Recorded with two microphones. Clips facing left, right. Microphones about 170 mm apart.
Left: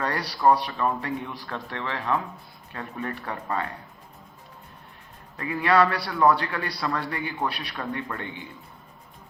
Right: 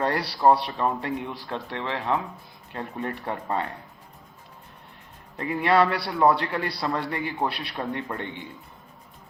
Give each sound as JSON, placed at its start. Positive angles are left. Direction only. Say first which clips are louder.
{"t": 0.0, "sound": "a man's voice", "louder": "right 2 dB", "side_deg": -25}
{"t": 5.4, "sound": "a man's voice", "louder": "even", "side_deg": -25}